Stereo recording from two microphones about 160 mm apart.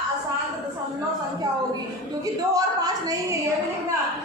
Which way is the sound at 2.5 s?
20° right (ahead or behind).